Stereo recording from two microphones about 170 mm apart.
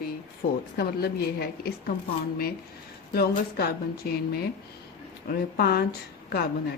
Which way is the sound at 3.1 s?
65° left (ahead or behind).